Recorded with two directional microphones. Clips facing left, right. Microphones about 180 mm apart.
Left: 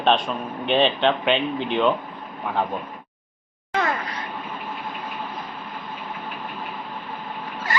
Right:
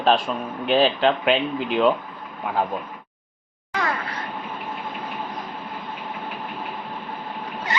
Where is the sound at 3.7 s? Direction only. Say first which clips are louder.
Left 2 dB; 20° left (ahead or behind).